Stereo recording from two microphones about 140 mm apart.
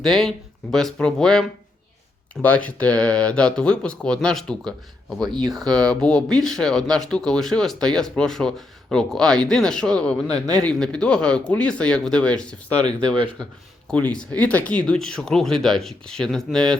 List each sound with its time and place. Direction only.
0.0 s speech: centre (ahead or behind)
5.2 s speech: 30° right (ahead or behind)
5.7 s speech: 5° left (ahead or behind)